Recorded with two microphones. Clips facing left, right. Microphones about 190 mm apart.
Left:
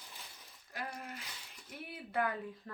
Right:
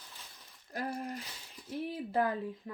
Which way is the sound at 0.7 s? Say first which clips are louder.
Right 7 dB; 35° right (ahead or behind).